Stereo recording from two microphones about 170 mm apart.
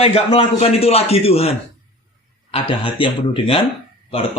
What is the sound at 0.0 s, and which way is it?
Speech, 35° left (ahead or behind).